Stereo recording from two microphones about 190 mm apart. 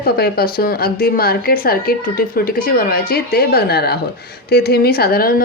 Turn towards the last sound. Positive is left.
turn(degrees=50)  # may be behind; listen again after turning